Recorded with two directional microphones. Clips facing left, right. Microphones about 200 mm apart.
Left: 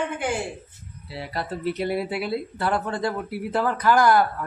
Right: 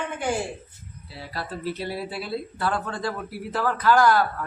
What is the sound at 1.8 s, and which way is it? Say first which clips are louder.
Speech: left 5 dB; 60° left (ahead or behind).